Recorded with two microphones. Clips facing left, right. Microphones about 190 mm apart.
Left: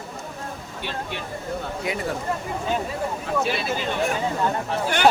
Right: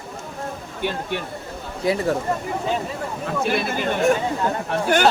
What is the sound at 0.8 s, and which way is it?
Speech, 50° right (ahead or behind).